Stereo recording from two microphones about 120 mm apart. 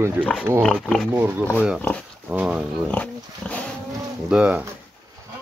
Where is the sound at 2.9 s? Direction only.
10° left (ahead or behind).